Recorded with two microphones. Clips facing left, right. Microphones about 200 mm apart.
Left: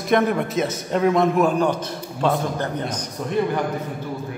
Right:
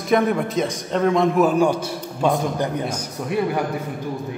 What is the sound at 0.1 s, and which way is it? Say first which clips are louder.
A man's voice: right 1 dB; centre (ahead or behind).